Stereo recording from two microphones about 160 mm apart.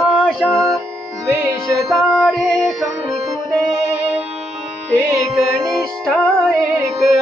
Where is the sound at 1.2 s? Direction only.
15° right (ahead or behind).